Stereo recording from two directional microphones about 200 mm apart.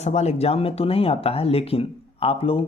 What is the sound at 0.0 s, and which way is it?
Speech, 35° left (ahead or behind).